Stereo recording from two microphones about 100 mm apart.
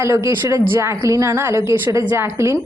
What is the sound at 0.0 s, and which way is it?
A woman's voice, 30° right (ahead or behind).